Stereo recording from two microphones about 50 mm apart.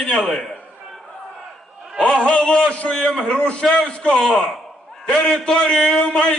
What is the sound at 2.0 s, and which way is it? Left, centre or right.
A man's voice, left.